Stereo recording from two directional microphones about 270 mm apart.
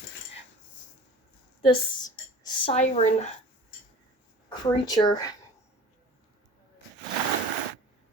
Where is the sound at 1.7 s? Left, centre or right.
Centre.